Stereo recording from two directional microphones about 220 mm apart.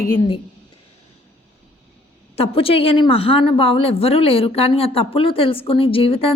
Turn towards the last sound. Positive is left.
turn(degrees=25)  # may be behind; listen again after turning